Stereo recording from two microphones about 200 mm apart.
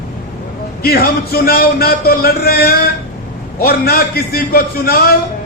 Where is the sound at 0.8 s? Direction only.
50° left (ahead or behind).